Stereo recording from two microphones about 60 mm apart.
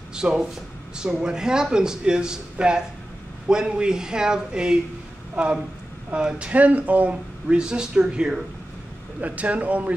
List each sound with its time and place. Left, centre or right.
0.1 s speech: centre
9.2 s speech: right